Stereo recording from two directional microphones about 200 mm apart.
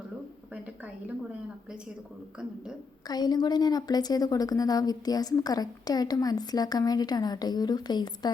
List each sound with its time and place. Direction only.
3.1 s a woman's voice: 20° left (ahead or behind)